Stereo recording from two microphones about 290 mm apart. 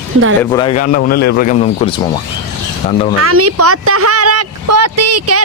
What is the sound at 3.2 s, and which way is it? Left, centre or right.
Speech, right.